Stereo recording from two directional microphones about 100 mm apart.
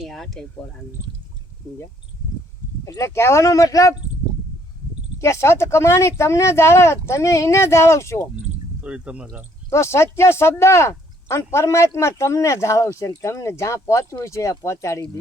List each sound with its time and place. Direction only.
0.0 s a sound: centre (ahead or behind)
2.8 s speech: 30° left (ahead or behind)
5.2 s speech: 30° left (ahead or behind)
8.8 s speech: 10° right (ahead or behind)
9.6 s speech: 30° left (ahead or behind)